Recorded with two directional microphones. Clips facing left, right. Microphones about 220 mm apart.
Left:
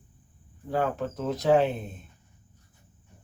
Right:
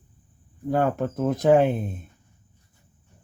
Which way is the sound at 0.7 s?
50° right (ahead or behind).